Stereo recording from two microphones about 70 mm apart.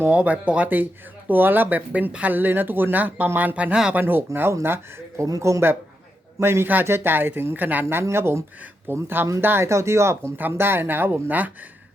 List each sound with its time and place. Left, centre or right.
0.1 s speech: centre
4.3 s speech: right
4.6 s speech: right
5.2 s speech: right
9.6 s speech: right